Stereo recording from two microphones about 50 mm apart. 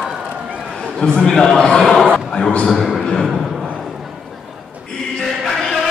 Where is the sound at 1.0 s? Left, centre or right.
Centre.